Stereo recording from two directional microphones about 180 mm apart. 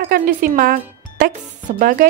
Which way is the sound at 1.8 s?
50° right (ahead or behind).